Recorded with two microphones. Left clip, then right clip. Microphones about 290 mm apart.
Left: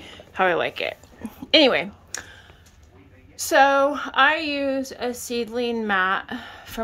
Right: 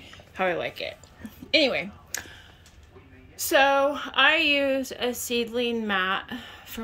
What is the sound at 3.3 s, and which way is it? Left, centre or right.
A woman's voice, centre.